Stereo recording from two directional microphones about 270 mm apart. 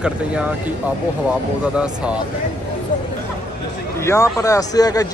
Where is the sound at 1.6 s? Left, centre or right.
Centre.